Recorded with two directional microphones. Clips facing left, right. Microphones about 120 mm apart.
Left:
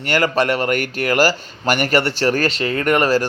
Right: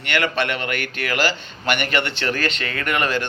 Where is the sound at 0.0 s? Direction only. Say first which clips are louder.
Left 5 dB; 40° left (ahead or behind).